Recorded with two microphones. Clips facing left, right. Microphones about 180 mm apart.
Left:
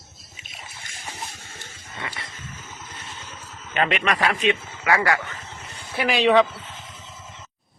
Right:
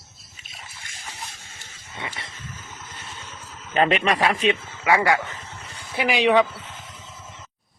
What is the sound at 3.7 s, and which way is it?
Speech, 35° right (ahead or behind).